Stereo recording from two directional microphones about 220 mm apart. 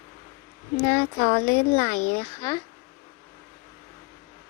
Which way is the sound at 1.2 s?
40° left (ahead or behind).